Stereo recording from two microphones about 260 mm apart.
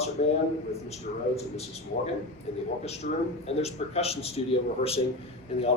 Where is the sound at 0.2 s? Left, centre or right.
Left.